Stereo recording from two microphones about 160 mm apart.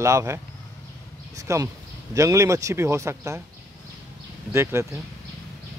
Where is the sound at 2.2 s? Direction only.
20° right (ahead or behind).